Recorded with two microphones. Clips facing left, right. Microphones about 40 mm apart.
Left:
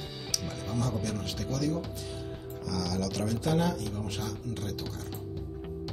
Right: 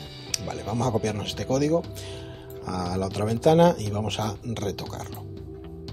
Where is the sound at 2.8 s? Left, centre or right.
Right.